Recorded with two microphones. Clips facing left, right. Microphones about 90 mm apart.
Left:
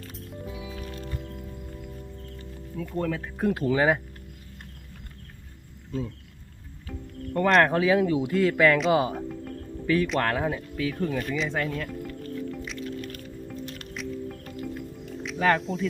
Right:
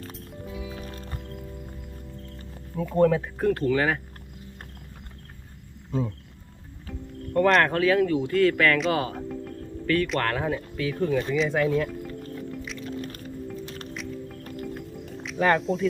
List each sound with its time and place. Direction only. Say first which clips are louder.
0.7 s music: left 1 dB; 40° right (ahead or behind)
2.4 s music: right 4 dB; 40° right (ahead or behind)
3.3 s speech: right 1 dB; 5° left (ahead or behind)
7.3 s speech: even; centre (ahead or behind)
9.1 s speech: even; centre (ahead or behind)
13.0 s music: right 2 dB; 40° right (ahead or behind)
13.9 s music: left 5 dB; centre (ahead or behind)
14.4 s music: even; 45° right (ahead or behind)
15.2 s speech: right 1 dB; centre (ahead or behind)